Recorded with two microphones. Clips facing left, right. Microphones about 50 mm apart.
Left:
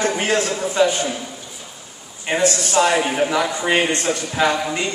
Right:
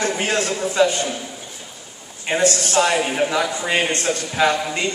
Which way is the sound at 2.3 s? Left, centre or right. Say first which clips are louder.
Even; left.